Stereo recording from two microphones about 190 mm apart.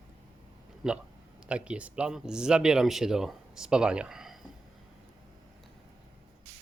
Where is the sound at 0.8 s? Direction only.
5° right (ahead or behind).